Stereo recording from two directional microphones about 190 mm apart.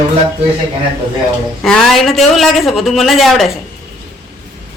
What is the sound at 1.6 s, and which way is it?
A man's voice, centre (ahead or behind).